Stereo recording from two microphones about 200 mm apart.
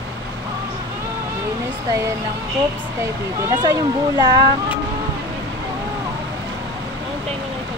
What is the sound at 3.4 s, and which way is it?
Speech, 15° right (ahead or behind).